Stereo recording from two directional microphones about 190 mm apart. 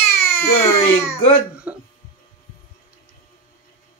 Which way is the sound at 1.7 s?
10° right (ahead or behind).